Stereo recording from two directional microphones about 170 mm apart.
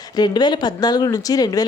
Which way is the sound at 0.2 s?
25° left (ahead or behind).